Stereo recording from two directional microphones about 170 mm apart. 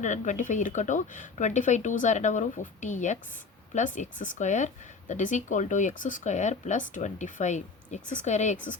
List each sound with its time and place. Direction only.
0.0 s speech: 45° left (ahead or behind)